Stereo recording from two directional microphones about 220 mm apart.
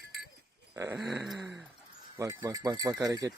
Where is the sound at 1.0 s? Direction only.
Centre (ahead or behind).